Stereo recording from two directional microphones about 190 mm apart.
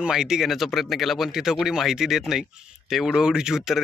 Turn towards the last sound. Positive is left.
turn(degrees=0)  # may be behind; listen again after turning